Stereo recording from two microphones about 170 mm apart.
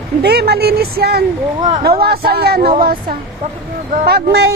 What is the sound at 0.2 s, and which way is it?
A woman's voice, 75° right (ahead or behind).